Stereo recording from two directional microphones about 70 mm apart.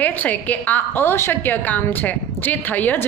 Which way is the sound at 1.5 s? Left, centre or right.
Left.